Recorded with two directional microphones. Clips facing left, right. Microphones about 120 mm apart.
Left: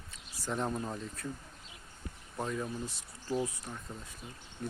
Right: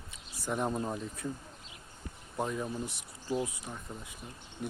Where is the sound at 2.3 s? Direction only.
10° right (ahead or behind).